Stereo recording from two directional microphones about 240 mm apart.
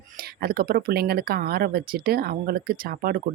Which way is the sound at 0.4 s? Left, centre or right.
Right.